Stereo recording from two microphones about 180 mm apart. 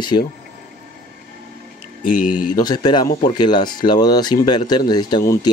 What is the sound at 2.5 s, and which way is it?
Speech, 20° left (ahead or behind).